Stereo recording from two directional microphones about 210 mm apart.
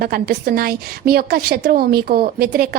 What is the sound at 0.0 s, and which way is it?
A woman's voice, 50° right (ahead or behind).